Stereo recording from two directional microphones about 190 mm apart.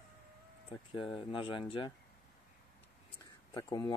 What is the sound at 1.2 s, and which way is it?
Speech, 25° left (ahead or behind).